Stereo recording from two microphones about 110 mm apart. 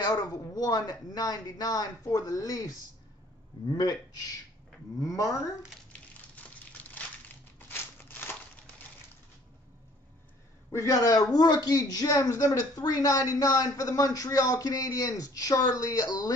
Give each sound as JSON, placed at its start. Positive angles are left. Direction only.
{"t": 0.0, "sound": "a man's voice", "side_deg": 35}
{"t": 5.0, "sound": "speech", "side_deg": 30}
{"t": 6.3, "sound": "a sound", "side_deg": 15}
{"t": 7.5, "sound": "crumpling", "side_deg": 15}
{"t": 10.7, "sound": "a man's voice", "side_deg": 25}